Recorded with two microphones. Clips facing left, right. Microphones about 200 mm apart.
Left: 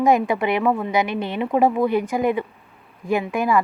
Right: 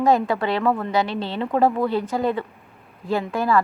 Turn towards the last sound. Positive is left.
turn(degrees=15)  # may be behind; listen again after turning